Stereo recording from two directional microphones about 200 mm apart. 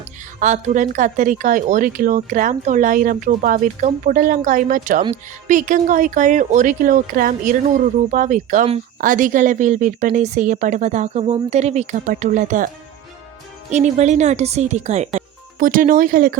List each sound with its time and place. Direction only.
0.3 s speech: 40° right (ahead or behind)